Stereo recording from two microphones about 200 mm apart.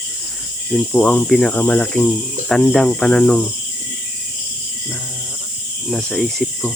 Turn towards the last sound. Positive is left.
turn(degrees=0)  # may be behind; listen again after turning